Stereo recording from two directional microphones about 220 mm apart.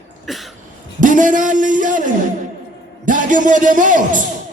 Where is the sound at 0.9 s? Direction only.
35° right (ahead or behind).